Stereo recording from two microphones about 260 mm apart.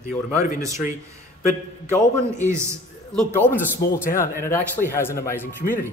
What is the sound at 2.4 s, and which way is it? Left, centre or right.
Speech, centre.